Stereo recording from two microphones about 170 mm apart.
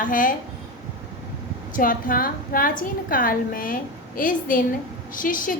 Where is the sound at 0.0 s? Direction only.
50° left (ahead or behind).